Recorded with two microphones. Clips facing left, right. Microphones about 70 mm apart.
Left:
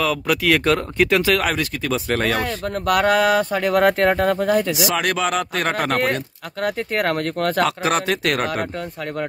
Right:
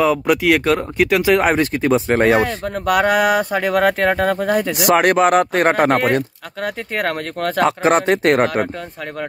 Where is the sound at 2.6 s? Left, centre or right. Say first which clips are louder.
Right 2 dB; centre.